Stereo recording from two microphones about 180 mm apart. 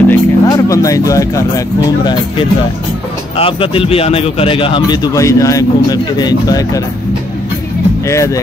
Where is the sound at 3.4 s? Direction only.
30° left (ahead or behind).